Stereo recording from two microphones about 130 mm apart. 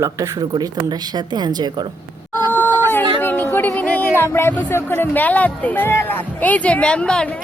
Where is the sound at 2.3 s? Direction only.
15° left (ahead or behind).